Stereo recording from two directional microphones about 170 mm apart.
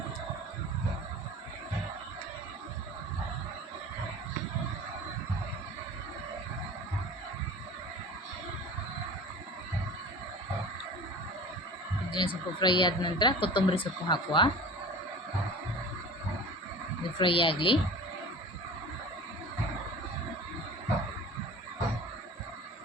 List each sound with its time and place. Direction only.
12.1 s speech: 30° left (ahead or behind)
17.2 s speech: 30° left (ahead or behind)